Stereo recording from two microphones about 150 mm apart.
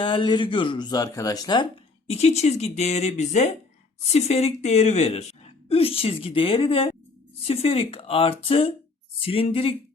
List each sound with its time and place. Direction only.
0.0 s a woman's voice: 35° left (ahead or behind)
2.0 s a woman's voice: 45° left (ahead or behind)